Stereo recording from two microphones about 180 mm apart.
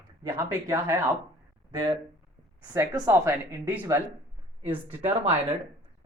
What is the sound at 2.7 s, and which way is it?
Speech, 15° right (ahead or behind).